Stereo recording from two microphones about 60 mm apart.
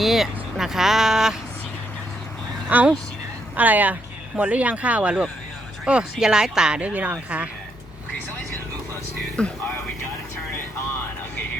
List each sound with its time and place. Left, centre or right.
0.0 s speech: centre
2.6 s speech: right
9.3 s speech: centre